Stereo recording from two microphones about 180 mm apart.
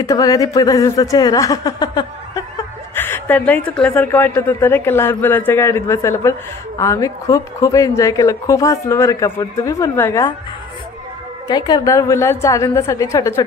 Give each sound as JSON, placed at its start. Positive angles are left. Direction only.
{"t": 0.0, "sound": "a woman's voice", "side_deg": 20}
{"t": 11.4, "sound": "speech", "side_deg": 20}